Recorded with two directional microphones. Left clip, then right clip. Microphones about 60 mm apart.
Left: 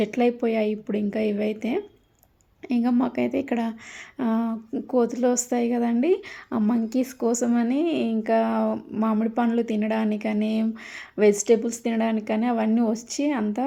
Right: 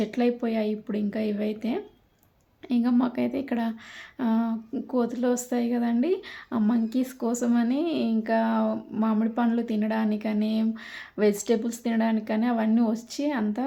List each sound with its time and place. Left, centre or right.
0.0 s speech: left
8.2 s speech: left
8.7 s speech: left